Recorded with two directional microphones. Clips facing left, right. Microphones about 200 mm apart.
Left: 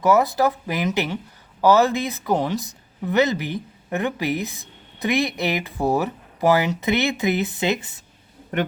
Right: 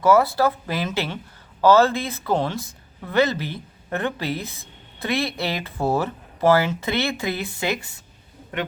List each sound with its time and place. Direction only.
0.0 s speech: 20° left (ahead or behind)